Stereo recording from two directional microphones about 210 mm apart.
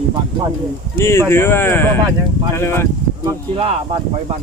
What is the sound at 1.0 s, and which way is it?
Speech, 10° left (ahead or behind).